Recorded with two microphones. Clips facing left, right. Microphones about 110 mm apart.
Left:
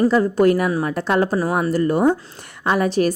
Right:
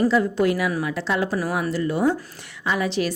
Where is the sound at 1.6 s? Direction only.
45° left (ahead or behind).